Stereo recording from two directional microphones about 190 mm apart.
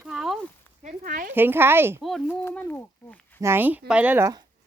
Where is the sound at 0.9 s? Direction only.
45° right (ahead or behind).